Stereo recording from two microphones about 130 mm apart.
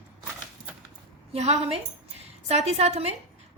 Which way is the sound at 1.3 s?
60° right (ahead or behind).